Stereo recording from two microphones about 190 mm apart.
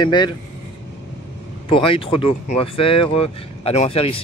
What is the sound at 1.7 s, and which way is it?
Speech, 30° left (ahead or behind).